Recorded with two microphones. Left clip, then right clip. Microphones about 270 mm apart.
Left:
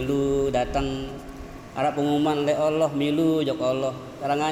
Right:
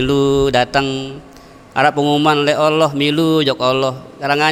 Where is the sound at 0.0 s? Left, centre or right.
Right.